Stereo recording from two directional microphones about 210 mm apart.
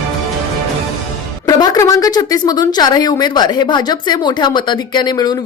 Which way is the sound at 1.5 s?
15° left (ahead or behind).